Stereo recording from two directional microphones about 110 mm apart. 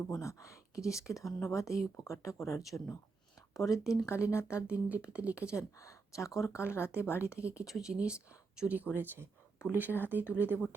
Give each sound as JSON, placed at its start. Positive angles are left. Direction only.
{"t": 0.1, "sound": "speech", "side_deg": 30}
{"t": 2.6, "sound": "speech", "side_deg": 0}
{"t": 3.5, "sound": "speech", "side_deg": 30}
{"t": 4.6, "sound": "speech", "side_deg": -15}
{"t": 5.5, "sound": "speech", "side_deg": 30}
{"t": 7.7, "sound": "speech", "side_deg": -5}